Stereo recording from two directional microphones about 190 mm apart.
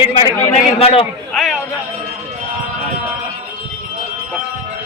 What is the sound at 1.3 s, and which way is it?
Speech, centre (ahead or behind).